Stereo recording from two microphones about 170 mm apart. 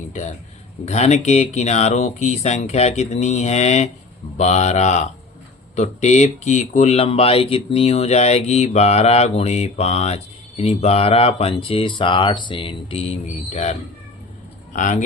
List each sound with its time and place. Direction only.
0.1 s speech: 45° left (ahead or behind)